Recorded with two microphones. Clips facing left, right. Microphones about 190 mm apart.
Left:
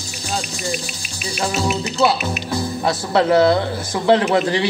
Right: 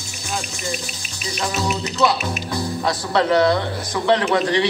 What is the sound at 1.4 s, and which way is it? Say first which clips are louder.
Speech: left 2 dB; 30° left (ahead or behind).